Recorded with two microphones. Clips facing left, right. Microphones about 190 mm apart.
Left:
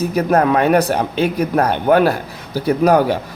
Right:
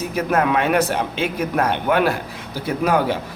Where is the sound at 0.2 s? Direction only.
35° left (ahead or behind).